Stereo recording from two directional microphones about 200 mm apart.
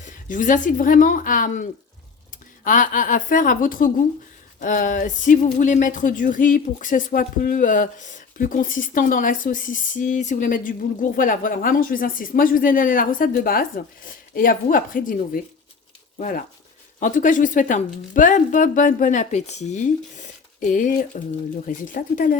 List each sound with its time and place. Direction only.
0.0 s a woman's voice: 40° left (ahead or behind)
2.6 s a woman's voice: 40° left (ahead or behind)